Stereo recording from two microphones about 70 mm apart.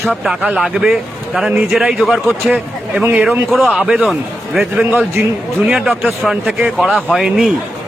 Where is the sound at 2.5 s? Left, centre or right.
Centre.